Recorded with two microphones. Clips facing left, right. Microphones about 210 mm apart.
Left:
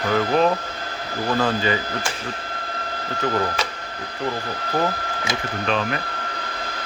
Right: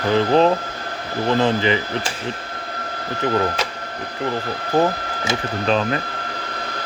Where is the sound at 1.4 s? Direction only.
20° right (ahead or behind).